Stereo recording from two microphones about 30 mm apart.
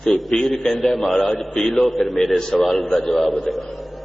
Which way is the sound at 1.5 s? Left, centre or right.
Centre.